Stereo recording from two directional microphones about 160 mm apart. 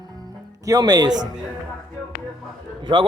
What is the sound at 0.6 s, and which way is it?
Speech, 20° right (ahead or behind).